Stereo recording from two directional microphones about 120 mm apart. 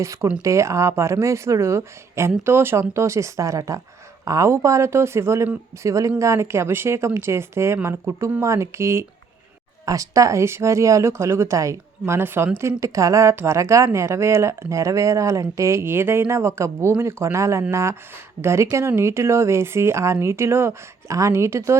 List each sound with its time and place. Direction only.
0.0 s speech: 25° right (ahead or behind)